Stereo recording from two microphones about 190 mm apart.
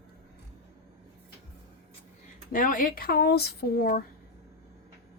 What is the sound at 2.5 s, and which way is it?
Speech, 45° left (ahead or behind).